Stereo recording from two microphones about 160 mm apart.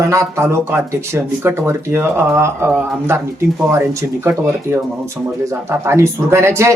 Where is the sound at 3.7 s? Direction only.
15° right (ahead or behind).